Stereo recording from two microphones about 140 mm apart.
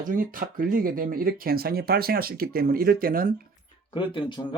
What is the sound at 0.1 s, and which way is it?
Speech, 75° right (ahead or behind).